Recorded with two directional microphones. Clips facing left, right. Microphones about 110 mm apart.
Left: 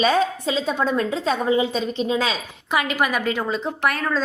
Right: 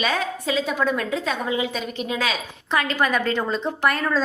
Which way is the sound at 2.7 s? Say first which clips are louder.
Even; 10° left (ahead or behind).